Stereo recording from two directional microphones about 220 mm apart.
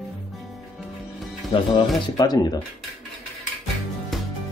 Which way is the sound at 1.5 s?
20° left (ahead or behind).